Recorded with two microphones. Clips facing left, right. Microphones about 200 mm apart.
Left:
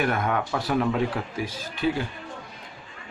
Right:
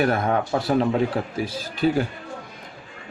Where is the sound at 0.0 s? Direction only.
35° right (ahead or behind).